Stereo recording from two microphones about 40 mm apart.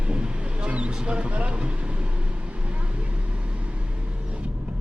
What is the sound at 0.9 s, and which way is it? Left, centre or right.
Speech, right.